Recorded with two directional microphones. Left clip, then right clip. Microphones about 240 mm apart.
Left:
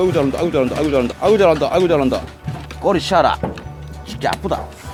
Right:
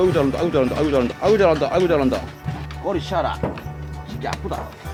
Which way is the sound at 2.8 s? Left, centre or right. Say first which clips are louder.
Left 8 dB; left.